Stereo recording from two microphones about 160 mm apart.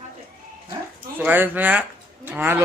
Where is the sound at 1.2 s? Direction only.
10° right (ahead or behind).